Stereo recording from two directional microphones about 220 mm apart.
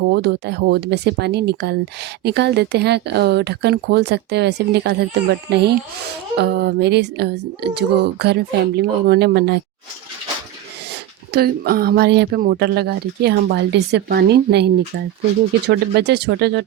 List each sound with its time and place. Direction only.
0.1 s speech: 50° right (ahead or behind)
11.3 s speech: 45° right (ahead or behind)